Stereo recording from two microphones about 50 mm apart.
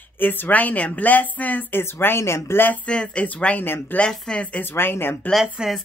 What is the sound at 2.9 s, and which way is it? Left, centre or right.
Speech, centre.